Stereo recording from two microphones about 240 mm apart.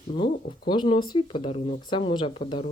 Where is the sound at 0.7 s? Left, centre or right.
Centre.